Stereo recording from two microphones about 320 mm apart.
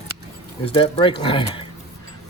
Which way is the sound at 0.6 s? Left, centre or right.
Centre.